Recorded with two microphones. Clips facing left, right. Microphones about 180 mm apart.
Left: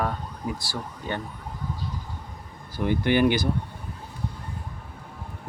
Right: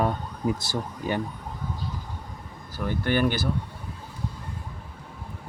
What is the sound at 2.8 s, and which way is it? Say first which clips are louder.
Speech: left 3 dB; 15° left (ahead or behind).